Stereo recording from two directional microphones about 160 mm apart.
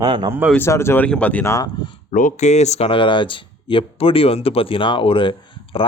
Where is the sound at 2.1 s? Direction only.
55° left (ahead or behind).